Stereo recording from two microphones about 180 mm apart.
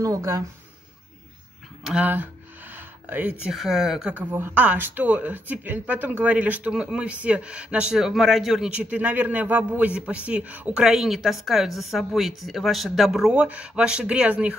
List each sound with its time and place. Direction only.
0.0 s speech: 15° right (ahead or behind)
1.9 s speech: 10° right (ahead or behind)